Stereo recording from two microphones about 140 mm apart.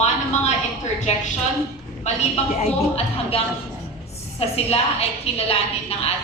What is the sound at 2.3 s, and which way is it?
A woman's voice, 45° left (ahead or behind).